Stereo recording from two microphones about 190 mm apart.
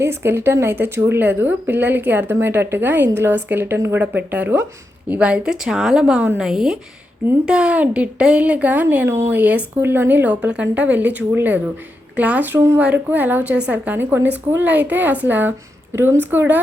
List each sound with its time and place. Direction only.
0.0 s a woman's voice: 15° right (ahead or behind)